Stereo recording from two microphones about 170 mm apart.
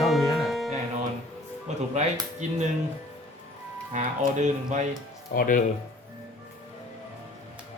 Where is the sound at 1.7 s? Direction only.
40° right (ahead or behind).